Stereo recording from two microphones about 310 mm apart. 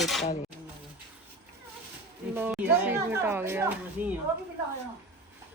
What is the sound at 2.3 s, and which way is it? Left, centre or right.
A woman's voice, centre.